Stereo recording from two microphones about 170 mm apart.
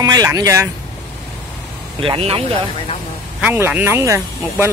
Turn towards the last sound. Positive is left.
turn(degrees=-15)  # may be behind; listen again after turning